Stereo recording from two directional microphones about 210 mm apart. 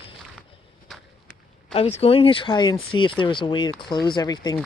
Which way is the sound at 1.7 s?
30° left (ahead or behind).